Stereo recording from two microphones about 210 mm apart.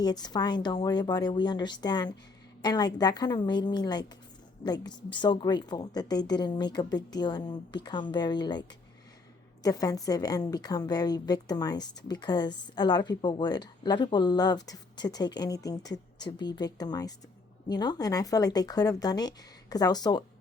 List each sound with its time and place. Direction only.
0.0 s a woman's voice: 20° left (ahead or behind)
9.6 s a woman's voice: 15° left (ahead or behind)